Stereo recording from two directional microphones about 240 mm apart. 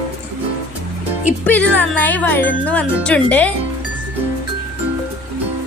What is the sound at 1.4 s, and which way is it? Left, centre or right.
Speech, centre.